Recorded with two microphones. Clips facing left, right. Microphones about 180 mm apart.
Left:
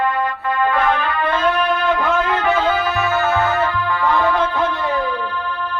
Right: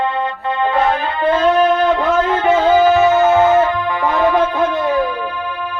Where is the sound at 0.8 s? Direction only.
25° right (ahead or behind).